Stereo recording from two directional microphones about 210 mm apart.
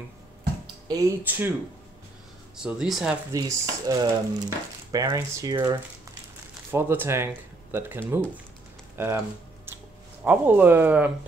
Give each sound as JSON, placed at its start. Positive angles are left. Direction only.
{"t": 0.8, "sound": "speech", "side_deg": -10}
{"t": 2.5, "sound": "speech", "side_deg": -5}
{"t": 3.3, "sound": "speech", "side_deg": -15}
{"t": 10.2, "sound": "speech", "side_deg": -10}